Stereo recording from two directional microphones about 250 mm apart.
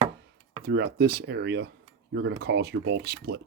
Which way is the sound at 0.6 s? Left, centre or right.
Right.